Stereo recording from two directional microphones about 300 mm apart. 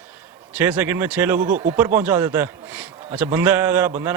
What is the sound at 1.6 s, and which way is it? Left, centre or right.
A man's voice, centre.